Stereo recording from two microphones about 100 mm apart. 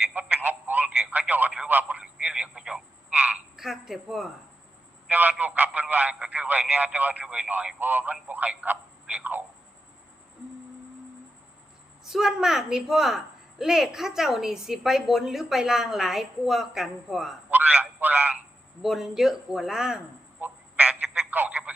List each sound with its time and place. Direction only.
0.1 s telephone: 15° right (ahead or behind)
3.5 s speech: 5° right (ahead or behind)
5.0 s speech: 15° right (ahead or behind)
12.0 s a woman's voice: 5° right (ahead or behind)
17.5 s speech: 15° right (ahead or behind)
18.8 s a woman's voice: 5° right (ahead or behind)
20.4 s telephone: 15° right (ahead or behind)